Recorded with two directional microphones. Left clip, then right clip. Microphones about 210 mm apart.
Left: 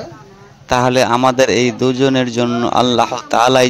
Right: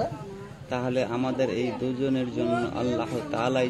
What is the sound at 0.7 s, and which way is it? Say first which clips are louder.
A man's voice: left 15 dB; 45° left (ahead or behind).